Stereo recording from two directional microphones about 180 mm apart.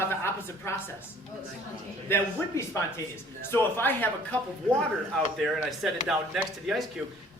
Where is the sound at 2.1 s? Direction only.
15° left (ahead or behind).